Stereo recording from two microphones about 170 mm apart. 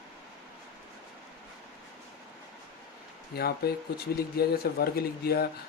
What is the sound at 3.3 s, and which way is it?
Speech, 70° left (ahead or behind).